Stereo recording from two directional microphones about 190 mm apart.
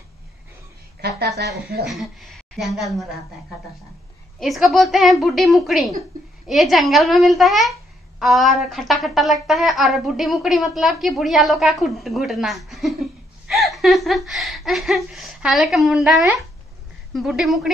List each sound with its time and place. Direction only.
1.0 s a woman's voice: 60° right (ahead or behind)
1.9 s speech: centre (ahead or behind)
4.4 s speech: centre (ahead or behind)